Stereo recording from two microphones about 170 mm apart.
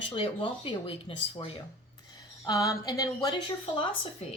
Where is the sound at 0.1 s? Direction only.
30° left (ahead or behind).